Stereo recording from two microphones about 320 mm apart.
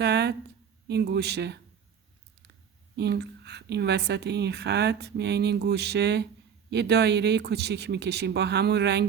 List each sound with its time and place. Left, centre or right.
0.0 s a woman's voice: right
2.9 s a woman's voice: right